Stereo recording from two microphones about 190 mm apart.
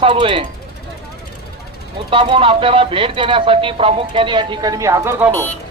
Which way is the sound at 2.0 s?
30° right (ahead or behind).